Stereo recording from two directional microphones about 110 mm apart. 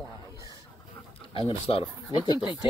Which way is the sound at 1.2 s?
55° left (ahead or behind).